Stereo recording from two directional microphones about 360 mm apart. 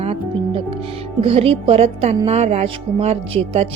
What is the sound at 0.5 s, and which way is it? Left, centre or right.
Speech, centre.